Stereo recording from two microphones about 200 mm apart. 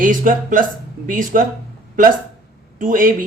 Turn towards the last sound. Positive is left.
turn(degrees=-40)  # may be behind; listen again after turning